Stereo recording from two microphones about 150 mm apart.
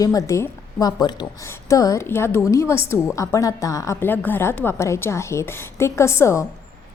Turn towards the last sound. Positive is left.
turn(degrees=20)  # may be behind; listen again after turning